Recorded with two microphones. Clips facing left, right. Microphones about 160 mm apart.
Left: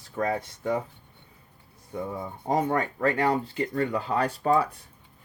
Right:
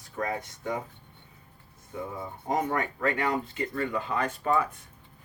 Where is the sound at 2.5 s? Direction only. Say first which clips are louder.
Left 3 dB; 30° left (ahead or behind).